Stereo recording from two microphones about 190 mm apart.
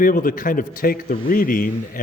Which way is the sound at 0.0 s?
45° left (ahead or behind).